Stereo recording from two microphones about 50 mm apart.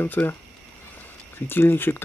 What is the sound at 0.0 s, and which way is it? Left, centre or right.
Speech, left.